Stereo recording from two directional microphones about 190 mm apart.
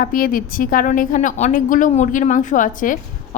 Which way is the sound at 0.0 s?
45° left (ahead or behind).